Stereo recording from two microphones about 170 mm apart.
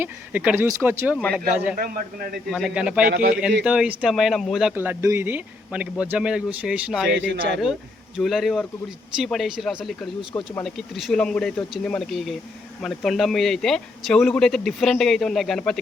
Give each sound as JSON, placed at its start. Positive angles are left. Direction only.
{"t": 0.0, "sound": "speech", "side_deg": -10}
{"t": 1.7, "sound": "a man's voice", "side_deg": -55}
{"t": 2.5, "sound": "speech", "side_deg": 0}
{"t": 3.1, "sound": "a man's voice", "side_deg": -60}
{"t": 3.6, "sound": "speech", "side_deg": -5}
{"t": 4.7, "sound": "speech", "side_deg": -10}
{"t": 7.3, "sound": "speech", "side_deg": -90}
{"t": 7.6, "sound": "speech", "side_deg": 0}